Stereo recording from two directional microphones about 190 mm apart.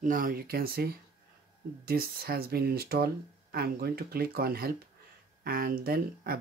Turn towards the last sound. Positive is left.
turn(degrees=-50)  # may be behind; listen again after turning